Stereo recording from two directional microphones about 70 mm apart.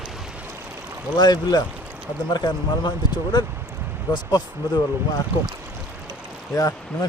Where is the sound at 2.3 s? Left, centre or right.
Left.